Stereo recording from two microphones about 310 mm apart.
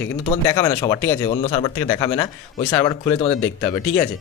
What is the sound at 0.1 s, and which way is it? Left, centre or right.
Speech, centre.